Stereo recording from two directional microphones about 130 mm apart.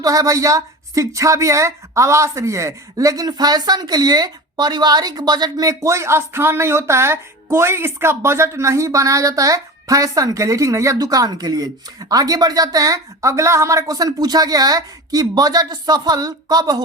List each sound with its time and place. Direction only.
0.0 s a woman's voice: 25° right (ahead or behind)